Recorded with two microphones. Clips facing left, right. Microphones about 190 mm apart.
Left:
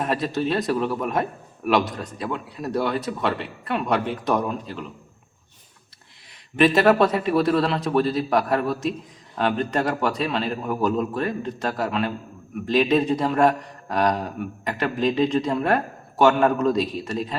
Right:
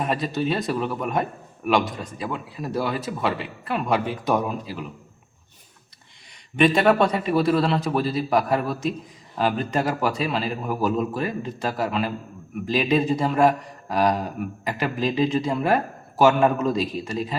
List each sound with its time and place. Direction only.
0.0 s a man's voice: centre (ahead or behind)
6.6 s a man's voice: centre (ahead or behind)